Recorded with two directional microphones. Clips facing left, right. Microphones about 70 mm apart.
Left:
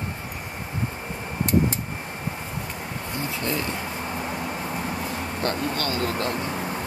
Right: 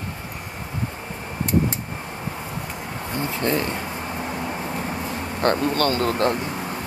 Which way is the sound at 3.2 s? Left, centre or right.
Right.